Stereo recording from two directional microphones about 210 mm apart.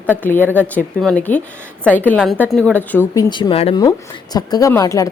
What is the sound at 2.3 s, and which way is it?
Speech, 10° right (ahead or behind).